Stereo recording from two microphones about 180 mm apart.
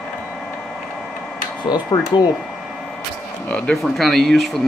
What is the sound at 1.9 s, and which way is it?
Speech, 20° left (ahead or behind).